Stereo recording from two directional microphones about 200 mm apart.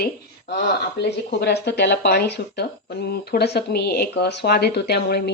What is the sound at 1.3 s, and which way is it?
Speech, 55° left (ahead or behind).